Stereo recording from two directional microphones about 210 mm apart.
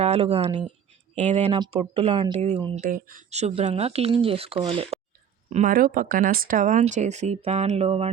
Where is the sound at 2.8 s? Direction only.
40° right (ahead or behind).